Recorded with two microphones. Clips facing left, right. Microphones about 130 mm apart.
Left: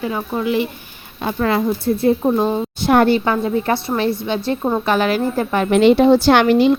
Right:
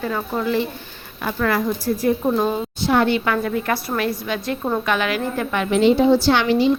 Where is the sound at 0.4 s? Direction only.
15° left (ahead or behind).